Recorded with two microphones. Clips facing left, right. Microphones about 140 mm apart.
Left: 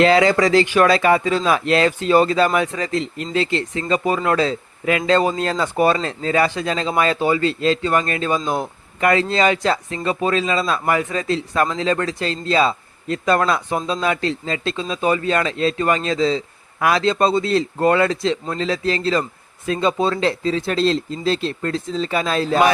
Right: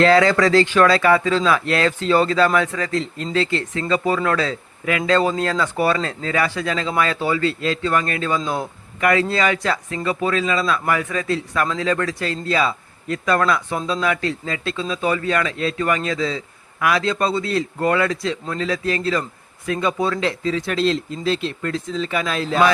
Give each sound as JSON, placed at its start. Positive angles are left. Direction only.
{"t": 0.0, "sound": "speech", "side_deg": 20}